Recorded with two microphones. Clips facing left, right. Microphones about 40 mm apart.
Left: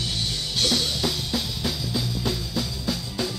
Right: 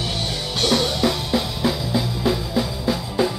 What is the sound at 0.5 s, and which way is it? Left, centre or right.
Music, centre.